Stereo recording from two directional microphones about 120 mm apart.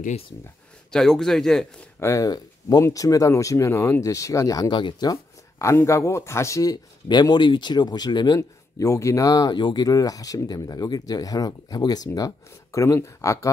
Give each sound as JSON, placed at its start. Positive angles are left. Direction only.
{"t": 0.9, "sound": "speech", "side_deg": 5}
{"t": 2.0, "sound": "speech", "side_deg": 25}
{"t": 5.1, "sound": "speech", "side_deg": 25}
{"t": 8.4, "sound": "speech", "side_deg": 25}